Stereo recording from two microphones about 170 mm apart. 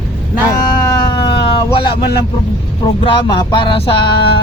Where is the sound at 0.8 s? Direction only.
25° left (ahead or behind).